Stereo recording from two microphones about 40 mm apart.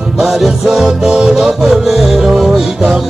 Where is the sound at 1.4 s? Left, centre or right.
Centre.